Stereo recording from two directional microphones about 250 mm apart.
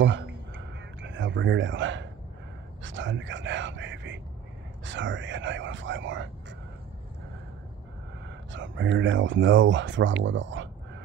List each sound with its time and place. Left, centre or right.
0.0 s a sound: right
1.0 s speech: right
8.5 s speech: right